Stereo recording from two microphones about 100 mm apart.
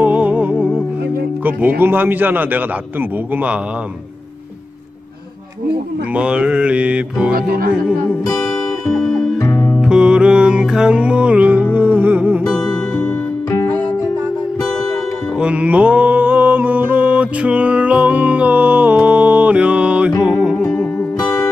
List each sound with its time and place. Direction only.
0.0 s music: 15° right (ahead or behind)
1.4 s a man's voice: 20° right (ahead or behind)
6.1 s mantra: 10° right (ahead or behind)
8.8 s music: 5° left (ahead or behind)
9.5 s music: 15° left (ahead or behind)
9.8 s music: 10° right (ahead or behind)
12.4 s music: 5° left (ahead or behind)
15.3 s music: 10° right (ahead or behind)